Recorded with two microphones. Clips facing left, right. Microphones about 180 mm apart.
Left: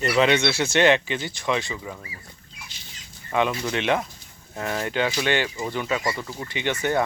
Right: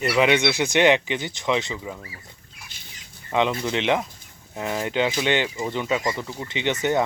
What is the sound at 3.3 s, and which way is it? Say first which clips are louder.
Speech: right 1 dB; 15° right (ahead or behind).